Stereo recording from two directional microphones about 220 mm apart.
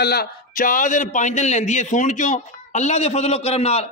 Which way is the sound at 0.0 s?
45° left (ahead or behind).